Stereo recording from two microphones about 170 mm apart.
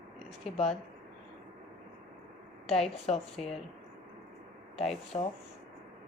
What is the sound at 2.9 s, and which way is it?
Speech, 35° left (ahead or behind).